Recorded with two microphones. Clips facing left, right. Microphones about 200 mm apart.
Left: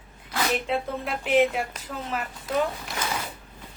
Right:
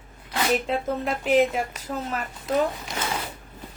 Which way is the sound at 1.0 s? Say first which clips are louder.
Right 1 dB; 40° right (ahead or behind).